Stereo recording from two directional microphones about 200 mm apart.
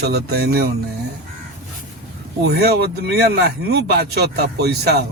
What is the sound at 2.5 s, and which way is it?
Speech, 55° right (ahead or behind).